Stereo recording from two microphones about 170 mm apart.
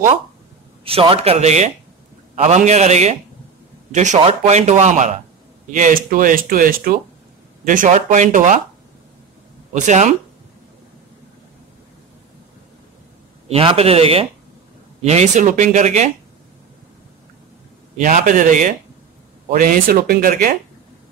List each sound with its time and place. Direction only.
0.8 s speech: 35° right (ahead or behind)
9.8 s speech: 45° right (ahead or behind)
13.5 s speech: 35° right (ahead or behind)
17.9 s speech: 50° right (ahead or behind)